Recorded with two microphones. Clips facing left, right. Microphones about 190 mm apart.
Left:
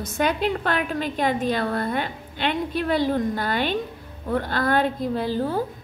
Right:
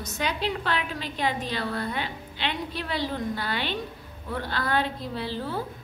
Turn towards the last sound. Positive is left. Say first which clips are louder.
# left 7 dB
turn(degrees=45)  # may be behind; listen again after turning